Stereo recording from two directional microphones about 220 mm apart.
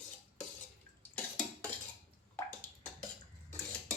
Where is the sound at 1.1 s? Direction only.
5° left (ahead or behind).